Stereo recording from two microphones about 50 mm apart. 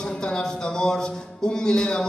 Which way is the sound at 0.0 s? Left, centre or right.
Centre.